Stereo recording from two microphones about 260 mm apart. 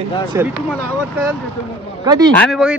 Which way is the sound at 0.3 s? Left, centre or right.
Centre.